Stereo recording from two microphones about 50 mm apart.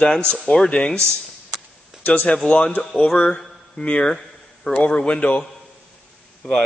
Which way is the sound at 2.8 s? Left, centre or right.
Centre.